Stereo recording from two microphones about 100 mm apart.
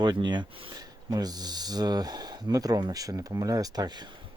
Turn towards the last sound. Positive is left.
turn(degrees=-40)  # may be behind; listen again after turning